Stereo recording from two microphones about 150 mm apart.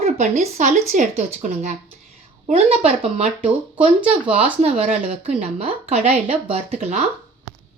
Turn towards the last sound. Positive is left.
turn(degrees=-50)  # may be behind; listen again after turning